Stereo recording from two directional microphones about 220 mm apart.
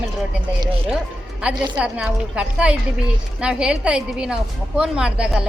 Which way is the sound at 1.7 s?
5° right (ahead or behind).